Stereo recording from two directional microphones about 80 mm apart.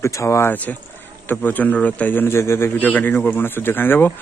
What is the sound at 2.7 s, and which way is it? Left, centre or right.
Speech, left.